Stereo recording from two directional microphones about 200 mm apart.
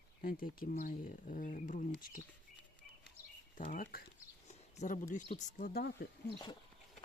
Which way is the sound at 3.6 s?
40° left (ahead or behind).